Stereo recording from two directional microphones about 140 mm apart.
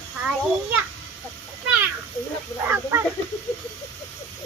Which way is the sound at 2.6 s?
15° right (ahead or behind).